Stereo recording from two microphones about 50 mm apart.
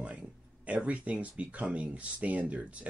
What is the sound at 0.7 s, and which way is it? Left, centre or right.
Speech, right.